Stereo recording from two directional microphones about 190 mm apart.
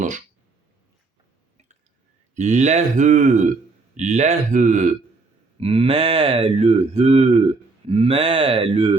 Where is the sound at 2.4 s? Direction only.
40° right (ahead or behind).